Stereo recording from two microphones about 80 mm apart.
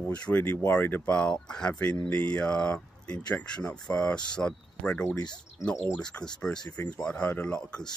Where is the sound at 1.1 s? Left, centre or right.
Centre.